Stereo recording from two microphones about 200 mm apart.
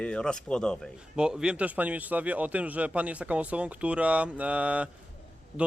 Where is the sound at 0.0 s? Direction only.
5° left (ahead or behind).